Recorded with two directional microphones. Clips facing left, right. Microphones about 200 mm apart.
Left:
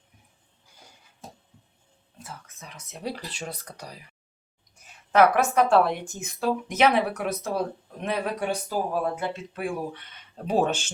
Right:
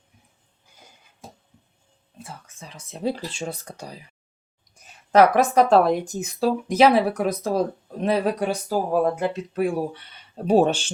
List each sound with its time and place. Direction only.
2.2 s speech: 30° right (ahead or behind)
5.1 s speech: 35° right (ahead or behind)